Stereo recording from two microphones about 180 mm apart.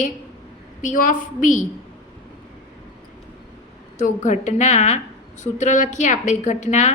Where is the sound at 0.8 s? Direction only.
45° left (ahead or behind).